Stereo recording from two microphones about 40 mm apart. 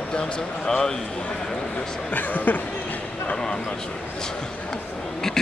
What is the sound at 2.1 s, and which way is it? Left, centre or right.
Speech, left.